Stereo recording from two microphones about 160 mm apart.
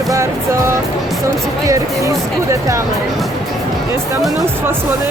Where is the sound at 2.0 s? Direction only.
20° right (ahead or behind).